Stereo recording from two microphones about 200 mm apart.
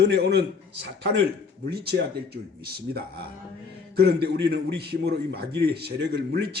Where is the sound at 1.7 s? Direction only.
55° right (ahead or behind).